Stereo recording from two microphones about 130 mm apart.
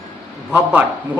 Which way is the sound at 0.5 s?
15° right (ahead or behind).